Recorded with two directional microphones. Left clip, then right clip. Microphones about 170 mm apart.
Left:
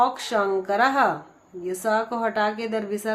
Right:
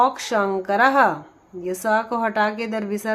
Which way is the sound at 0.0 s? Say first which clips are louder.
Right 2 dB; 35° right (ahead or behind).